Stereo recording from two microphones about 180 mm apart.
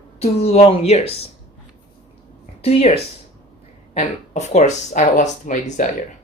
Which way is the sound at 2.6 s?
35° left (ahead or behind).